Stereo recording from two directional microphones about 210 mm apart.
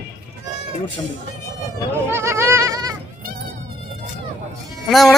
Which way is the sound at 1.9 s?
10° right (ahead or behind).